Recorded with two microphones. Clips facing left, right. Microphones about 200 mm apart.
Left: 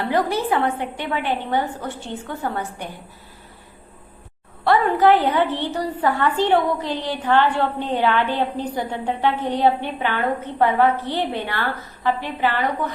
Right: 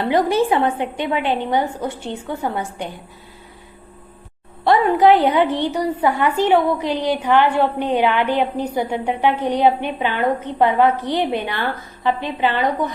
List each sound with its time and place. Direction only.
0.0 s a woman's voice: 20° right (ahead or behind)
4.6 s a woman's voice: 15° right (ahead or behind)